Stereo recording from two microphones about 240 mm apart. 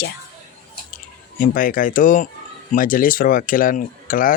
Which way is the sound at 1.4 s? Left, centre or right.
Left.